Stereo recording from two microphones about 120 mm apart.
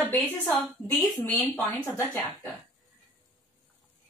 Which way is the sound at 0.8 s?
15° left (ahead or behind).